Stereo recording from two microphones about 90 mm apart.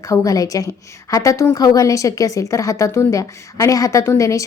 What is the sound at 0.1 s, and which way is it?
A woman's voice, 40° left (ahead or behind).